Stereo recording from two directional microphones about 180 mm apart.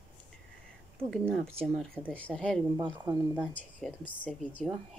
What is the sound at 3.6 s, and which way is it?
A woman's voice, 10° left (ahead or behind).